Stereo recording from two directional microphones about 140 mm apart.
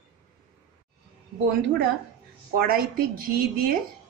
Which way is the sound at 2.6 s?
90° right.